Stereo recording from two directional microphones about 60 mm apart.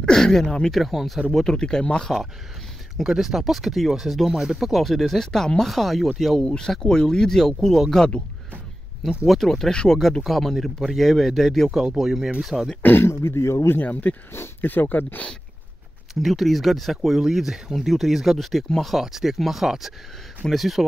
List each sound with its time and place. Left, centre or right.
0.0 s speech: centre
1.3 s speech: centre
3.0 s speech: centre
6.4 s speech: centre
9.2 s speech: centre
11.8 s speech: centre
12.8 s speech: left
14.3 s speech: left
16.2 s speech: centre